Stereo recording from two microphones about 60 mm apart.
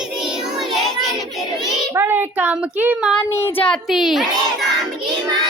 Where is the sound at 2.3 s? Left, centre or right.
Right.